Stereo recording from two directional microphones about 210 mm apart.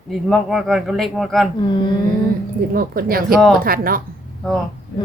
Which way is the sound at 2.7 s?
45° right (ahead or behind).